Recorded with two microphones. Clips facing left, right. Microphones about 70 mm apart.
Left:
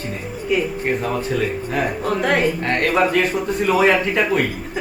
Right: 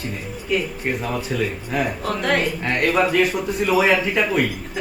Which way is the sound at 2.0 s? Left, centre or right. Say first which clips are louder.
Left 5 dB; centre.